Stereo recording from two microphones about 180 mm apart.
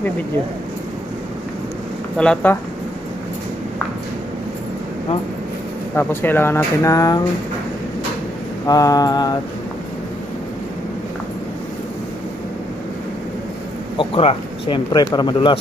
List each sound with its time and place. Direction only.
2.1 s speech: 10° left (ahead or behind)
5.9 s speech: 10° left (ahead or behind)
8.6 s speech: 20° left (ahead or behind)
13.9 s speech: 30° left (ahead or behind)